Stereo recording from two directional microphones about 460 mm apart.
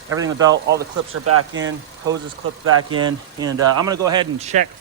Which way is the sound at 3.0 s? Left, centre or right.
Centre.